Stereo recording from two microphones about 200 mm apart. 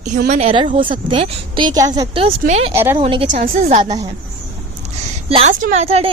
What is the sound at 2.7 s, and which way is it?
Speech, 10° right (ahead or behind).